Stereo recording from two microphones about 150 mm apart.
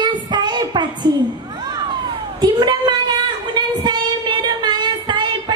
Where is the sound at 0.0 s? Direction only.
30° right (ahead or behind).